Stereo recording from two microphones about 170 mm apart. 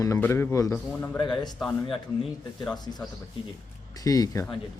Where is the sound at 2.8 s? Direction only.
25° left (ahead or behind).